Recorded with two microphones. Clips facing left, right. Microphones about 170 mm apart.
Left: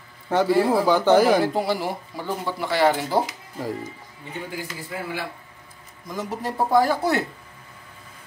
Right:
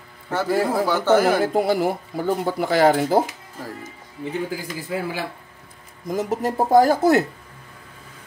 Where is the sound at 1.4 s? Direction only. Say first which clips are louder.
Right 4 dB; 50° right (ahead or behind).